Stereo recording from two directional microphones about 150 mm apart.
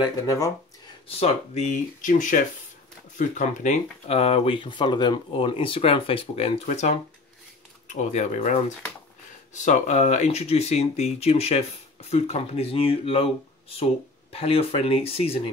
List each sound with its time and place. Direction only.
0.0 s speech: 20° left (ahead or behind)
1.0 s speech: 45° left (ahead or behind)
4.1 s speech: 40° left (ahead or behind)
14.3 s speech: 40° left (ahead or behind)